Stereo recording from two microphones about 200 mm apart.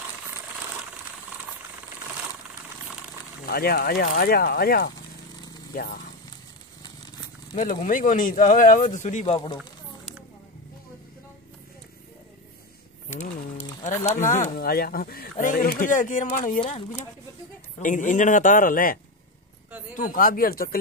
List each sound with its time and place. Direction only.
3.4 s speech: 50° left (ahead or behind)
7.5 s speech: 40° left (ahead or behind)
9.2 s speech: 25° left (ahead or behind)
13.1 s speech: 35° left (ahead or behind)
16.6 s speech: 30° left (ahead or behind)
17.7 s speech: 40° left (ahead or behind)